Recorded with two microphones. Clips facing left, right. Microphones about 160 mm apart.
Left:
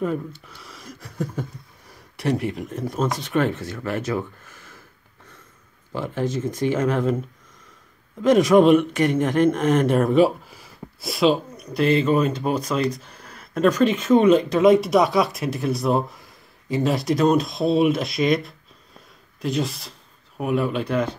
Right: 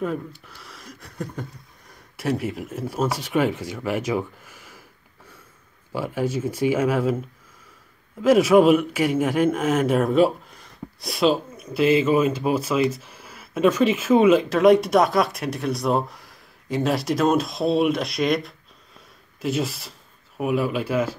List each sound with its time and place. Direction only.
0.5 s a man's voice: centre (ahead or behind)
5.9 s speech: 10° right (ahead or behind)
8.2 s a man's voice: 5° right (ahead or behind)